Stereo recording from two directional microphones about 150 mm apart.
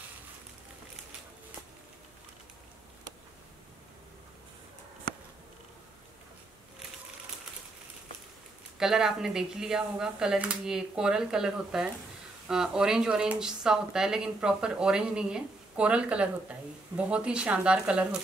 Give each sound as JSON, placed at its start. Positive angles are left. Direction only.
{"t": 8.7, "sound": "speech", "side_deg": -5}